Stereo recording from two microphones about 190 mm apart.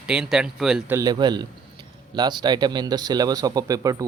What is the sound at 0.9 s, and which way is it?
Speech, 20° right (ahead or behind).